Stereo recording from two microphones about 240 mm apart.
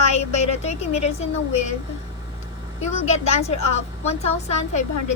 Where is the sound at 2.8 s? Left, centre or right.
Left.